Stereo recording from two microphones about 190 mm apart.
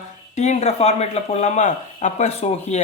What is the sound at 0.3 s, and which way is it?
Speech, 35° left (ahead or behind).